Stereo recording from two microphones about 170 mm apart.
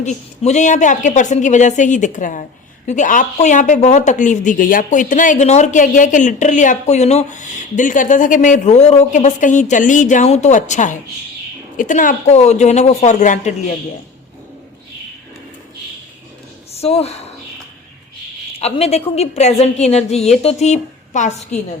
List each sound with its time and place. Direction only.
0.0 s a woman's voice: 45° left (ahead or behind)
16.7 s speech: 35° left (ahead or behind)
18.6 s a woman's voice: 40° left (ahead or behind)